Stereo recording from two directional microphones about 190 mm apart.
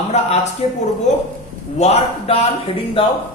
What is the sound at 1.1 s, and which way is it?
A woman's voice, 40° left (ahead or behind).